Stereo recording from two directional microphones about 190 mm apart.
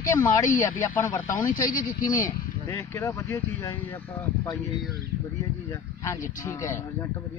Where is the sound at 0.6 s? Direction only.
10° left (ahead or behind).